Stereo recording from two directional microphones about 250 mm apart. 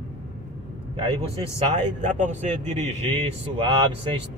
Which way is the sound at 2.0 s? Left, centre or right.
Right.